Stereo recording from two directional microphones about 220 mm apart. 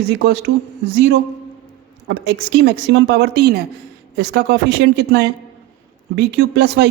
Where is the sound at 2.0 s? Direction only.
50° right (ahead or behind).